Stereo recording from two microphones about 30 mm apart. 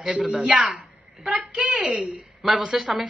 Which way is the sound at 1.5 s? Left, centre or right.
Right.